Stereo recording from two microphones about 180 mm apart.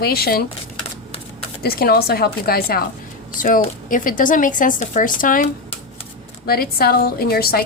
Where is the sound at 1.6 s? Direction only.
55° left (ahead or behind).